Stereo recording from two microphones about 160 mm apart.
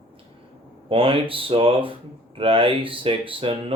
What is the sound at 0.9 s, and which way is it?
Speech, 35° right (ahead or behind).